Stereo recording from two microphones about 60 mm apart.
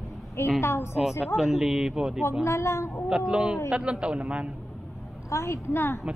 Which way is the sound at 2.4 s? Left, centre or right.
Left.